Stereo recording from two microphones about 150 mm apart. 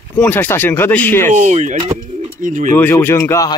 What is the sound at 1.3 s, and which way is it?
Speech, 50° right (ahead or behind).